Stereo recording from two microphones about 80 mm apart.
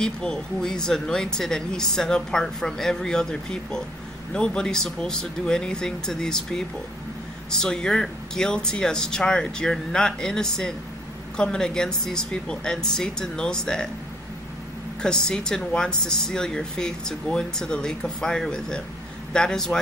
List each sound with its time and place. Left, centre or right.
0.0 s speech: centre
15.0 s speech: centre